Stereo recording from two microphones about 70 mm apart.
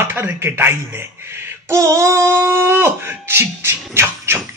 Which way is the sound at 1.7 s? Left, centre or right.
Right.